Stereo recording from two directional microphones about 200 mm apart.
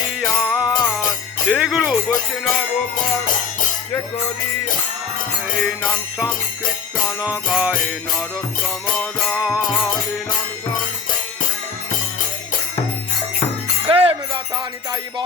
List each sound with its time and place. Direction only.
0.4 s music: 5° right (ahead or behind)
1.5 s speech: 5° right (ahead or behind)
7.2 s music: 5° right (ahead or behind)
13.8 s music: 30° right (ahead or behind)